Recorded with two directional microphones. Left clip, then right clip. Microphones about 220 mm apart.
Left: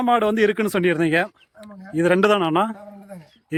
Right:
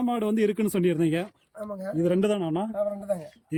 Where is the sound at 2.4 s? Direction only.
30° left (ahead or behind).